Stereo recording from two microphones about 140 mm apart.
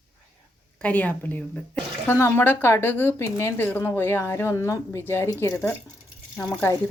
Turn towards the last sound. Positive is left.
turn(degrees=15)  # may be behind; listen again after turning